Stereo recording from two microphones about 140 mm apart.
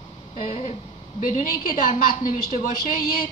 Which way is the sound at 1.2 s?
70° left (ahead or behind).